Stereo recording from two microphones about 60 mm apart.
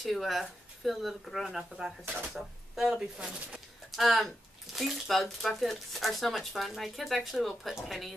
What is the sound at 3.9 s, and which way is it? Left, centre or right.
Speech, centre.